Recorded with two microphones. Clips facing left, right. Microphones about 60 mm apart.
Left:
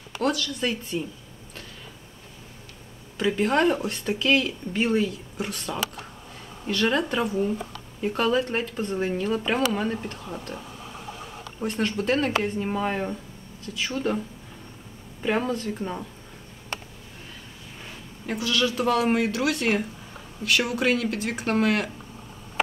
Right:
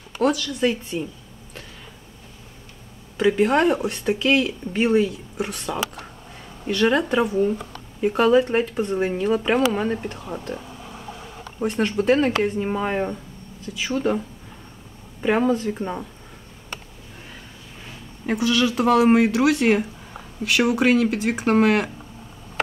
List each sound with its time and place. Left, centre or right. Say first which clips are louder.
0.2 s speech: right 5 dB; centre
3.2 s speech: right 4 dB; centre
11.6 s speech: right 5 dB; centre
15.2 s speech: right 6 dB; centre
18.2 s speech: right 5 dB; centre